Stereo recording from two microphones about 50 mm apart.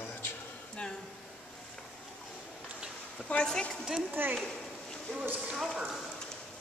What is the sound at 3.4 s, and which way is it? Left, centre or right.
Speech, centre.